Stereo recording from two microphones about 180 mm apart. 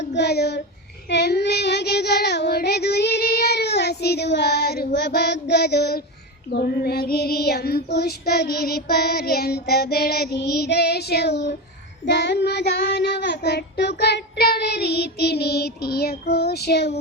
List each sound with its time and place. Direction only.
0.0 s child singing: 70° left (ahead or behind)